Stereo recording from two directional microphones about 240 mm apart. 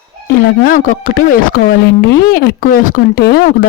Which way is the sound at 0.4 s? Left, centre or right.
Left.